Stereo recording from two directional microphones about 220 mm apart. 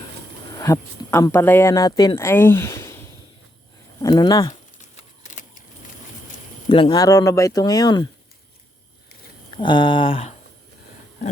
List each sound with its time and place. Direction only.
0.5 s speech: 15° left (ahead or behind)
4.9 s a sound: 35° left (ahead or behind)
6.7 s speech: 25° left (ahead or behind)
9.6 s speech: 20° left (ahead or behind)